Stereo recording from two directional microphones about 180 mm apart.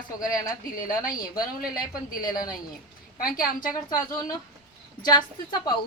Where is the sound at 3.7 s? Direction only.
20° left (ahead or behind).